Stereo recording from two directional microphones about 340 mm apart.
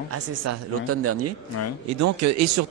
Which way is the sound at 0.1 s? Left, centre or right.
Right.